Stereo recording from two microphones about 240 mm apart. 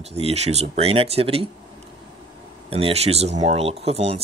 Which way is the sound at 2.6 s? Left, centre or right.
Right.